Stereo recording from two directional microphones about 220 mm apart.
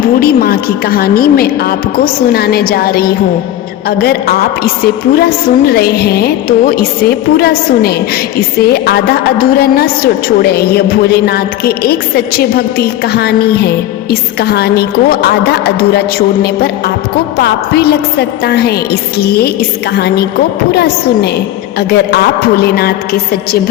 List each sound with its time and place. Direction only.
0.2 s a woman's voice: 45° left (ahead or behind)